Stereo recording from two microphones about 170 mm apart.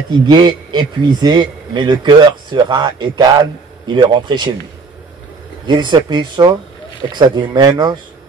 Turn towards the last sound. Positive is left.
turn(degrees=-25)  # may be behind; listen again after turning